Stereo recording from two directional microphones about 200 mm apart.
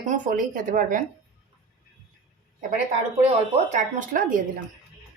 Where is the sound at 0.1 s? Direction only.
40° right (ahead or behind).